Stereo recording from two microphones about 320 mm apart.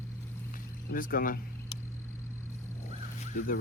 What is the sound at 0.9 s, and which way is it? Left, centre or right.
Speech, left.